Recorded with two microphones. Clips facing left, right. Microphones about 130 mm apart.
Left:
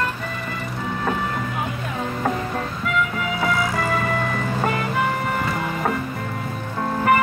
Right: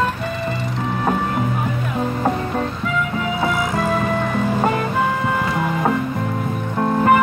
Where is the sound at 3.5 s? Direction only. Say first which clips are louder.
Right 1 dB; 20° right (ahead or behind).